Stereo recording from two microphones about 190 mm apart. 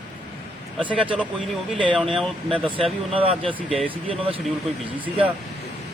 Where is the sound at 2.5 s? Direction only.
30° right (ahead or behind).